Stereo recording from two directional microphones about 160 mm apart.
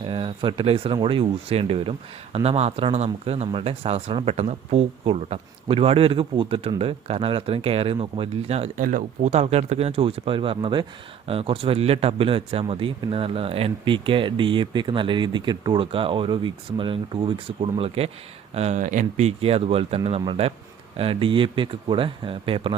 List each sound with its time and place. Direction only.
0.0 s speech: 35° right (ahead or behind)
8.8 s speech: 55° right (ahead or behind); by 22.7 s 35° right (ahead or behind)